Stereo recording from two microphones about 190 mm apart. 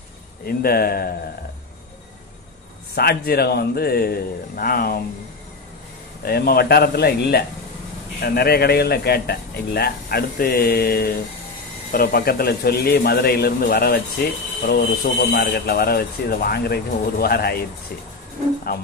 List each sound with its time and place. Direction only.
0.5 s a man's voice: 50° left (ahead or behind)
2.9 s a man's voice: 55° left (ahead or behind)
6.2 s a man's voice: 55° left (ahead or behind)